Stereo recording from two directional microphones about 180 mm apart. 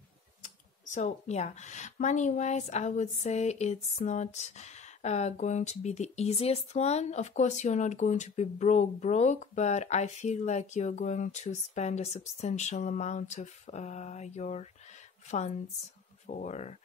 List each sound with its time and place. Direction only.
0.4 s speech: 45° left (ahead or behind)